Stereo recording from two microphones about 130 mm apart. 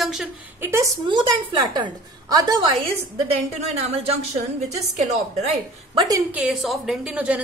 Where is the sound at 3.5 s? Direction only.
55° right (ahead or behind).